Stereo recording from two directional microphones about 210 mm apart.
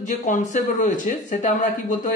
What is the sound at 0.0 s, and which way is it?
Speech, 35° left (ahead or behind).